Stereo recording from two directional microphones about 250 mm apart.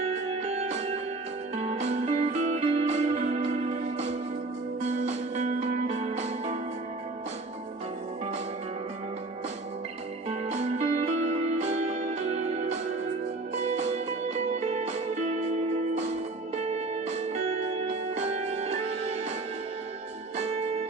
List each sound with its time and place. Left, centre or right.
0.5 s music: right
5.0 s music: right
10.2 s music: right